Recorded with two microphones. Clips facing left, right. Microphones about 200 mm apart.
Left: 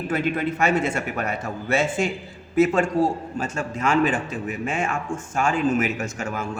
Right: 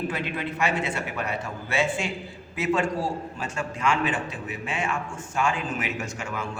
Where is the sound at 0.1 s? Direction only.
45° left (ahead or behind).